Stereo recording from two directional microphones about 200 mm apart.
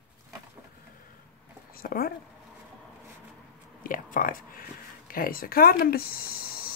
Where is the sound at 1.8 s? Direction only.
45° left (ahead or behind).